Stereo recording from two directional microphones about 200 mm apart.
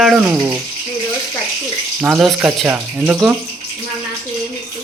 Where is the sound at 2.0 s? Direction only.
5° right (ahead or behind).